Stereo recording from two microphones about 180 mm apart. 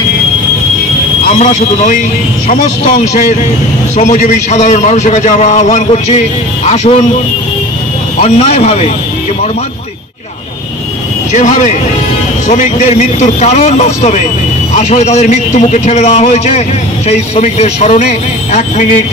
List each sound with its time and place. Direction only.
1.4 s a man's voice: 45° left (ahead or behind)
8.2 s a man's voice: 40° left (ahead or behind)
11.3 s a man's voice: 40° left (ahead or behind)